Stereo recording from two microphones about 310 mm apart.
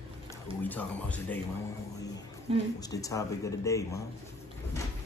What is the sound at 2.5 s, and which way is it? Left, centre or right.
Speech, centre.